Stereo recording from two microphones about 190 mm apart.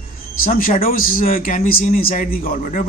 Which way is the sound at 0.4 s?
50° left (ahead or behind).